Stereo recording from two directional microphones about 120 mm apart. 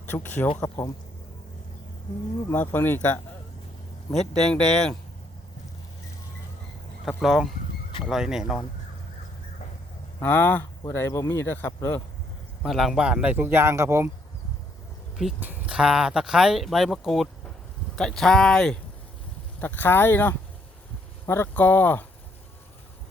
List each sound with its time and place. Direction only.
0.0 s speech: 15° left (ahead or behind)
2.5 s speech: 15° left (ahead or behind)
4.1 s speech: 5° left (ahead or behind)
7.2 s speech: centre (ahead or behind)
10.2 s speech: 15° left (ahead or behind)
12.6 s speech: centre (ahead or behind); by 14.1 s 20° right (ahead or behind)
15.4 s speech: 10° right (ahead or behind); by 22.0 s 15° left (ahead or behind)